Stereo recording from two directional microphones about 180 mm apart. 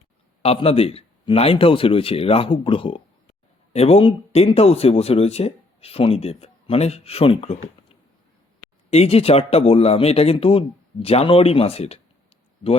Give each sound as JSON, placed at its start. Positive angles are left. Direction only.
{"t": 0.4, "sound": "speech", "side_deg": 35}